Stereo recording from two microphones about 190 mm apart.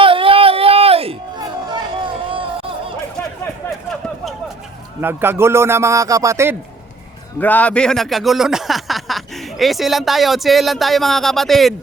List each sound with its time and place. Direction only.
0.0 s chatter: 30° right (ahead or behind)
3.2 s a sound: 5° left (ahead or behind)
4.9 s a man's voice: 10° right (ahead or behind)
7.3 s speech: 10° left (ahead or behind)